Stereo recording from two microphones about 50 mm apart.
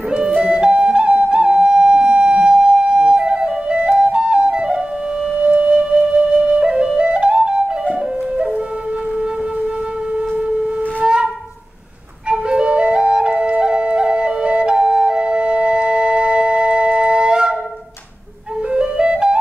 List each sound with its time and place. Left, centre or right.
0.4 s flute: centre
11.0 s wind instrument: centre
12.3 s flute: centre
18.7 s flute: centre